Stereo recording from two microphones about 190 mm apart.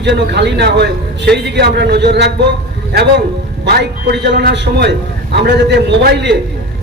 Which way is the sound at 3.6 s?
65° right (ahead or behind).